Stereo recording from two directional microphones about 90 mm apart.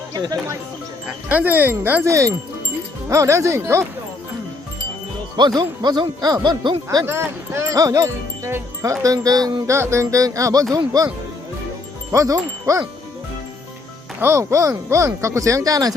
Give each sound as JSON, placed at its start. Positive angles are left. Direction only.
{"t": 0.1, "sound": "speech", "side_deg": -45}
{"t": 1.0, "sound": "speech", "side_deg": -15}
{"t": 2.0, "sound": "speech", "side_deg": -35}
{"t": 5.5, "sound": "speech", "side_deg": -55}
{"t": 7.0, "sound": "speech", "side_deg": -30}
{"t": 9.7, "sound": "speech", "side_deg": -30}
{"t": 12.1, "sound": "wind chime", "side_deg": -35}
{"t": 14.2, "sound": "speech", "side_deg": -30}